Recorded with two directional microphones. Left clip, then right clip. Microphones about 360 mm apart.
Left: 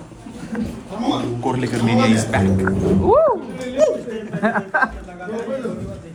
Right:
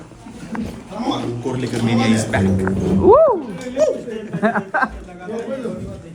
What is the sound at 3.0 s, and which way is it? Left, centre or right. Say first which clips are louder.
Speech: right 4 dB; right.